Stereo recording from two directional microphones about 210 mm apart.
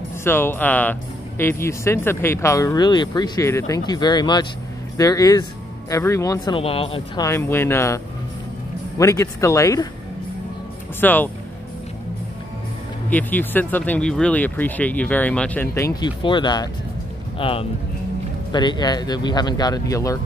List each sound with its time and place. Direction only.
0.2 s speech: 10° left (ahead or behind); by 7.2 s 25° left (ahead or behind)
7.2 s speech: 10° left (ahead or behind)
11.0 s speech: 10° left (ahead or behind)
13.1 s speech: 10° left (ahead or behind)